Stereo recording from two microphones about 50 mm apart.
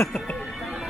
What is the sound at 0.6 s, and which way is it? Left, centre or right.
Music, centre.